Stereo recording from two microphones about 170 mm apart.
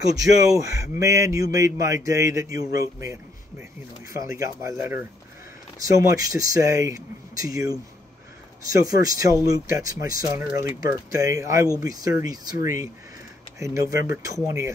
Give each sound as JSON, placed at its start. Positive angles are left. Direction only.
{"t": 0.1, "sound": "a man's voice", "side_deg": -20}
{"t": 8.7, "sound": "a man's voice", "side_deg": -20}